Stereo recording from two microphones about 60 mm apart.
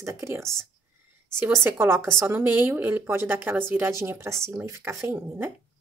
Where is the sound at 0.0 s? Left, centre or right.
Right.